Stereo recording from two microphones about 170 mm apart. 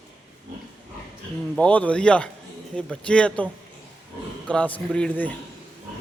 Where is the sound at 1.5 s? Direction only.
10° left (ahead or behind).